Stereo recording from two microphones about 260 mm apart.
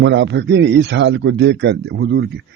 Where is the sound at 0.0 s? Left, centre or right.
Right.